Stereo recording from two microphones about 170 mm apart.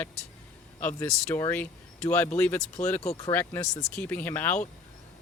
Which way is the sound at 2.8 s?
50° left (ahead or behind).